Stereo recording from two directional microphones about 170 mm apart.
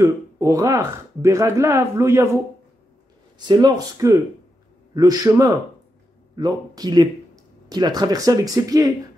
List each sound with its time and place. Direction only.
0.0 s speech: 20° right (ahead or behind)
3.3 s speech: 25° right (ahead or behind)